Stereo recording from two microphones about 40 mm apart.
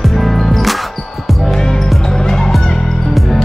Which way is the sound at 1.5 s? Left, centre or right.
Centre.